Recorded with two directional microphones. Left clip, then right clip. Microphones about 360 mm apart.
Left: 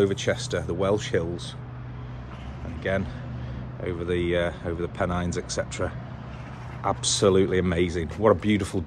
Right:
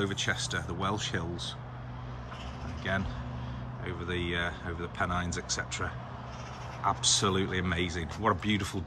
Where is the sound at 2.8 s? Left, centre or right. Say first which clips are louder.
Left 6 dB; centre.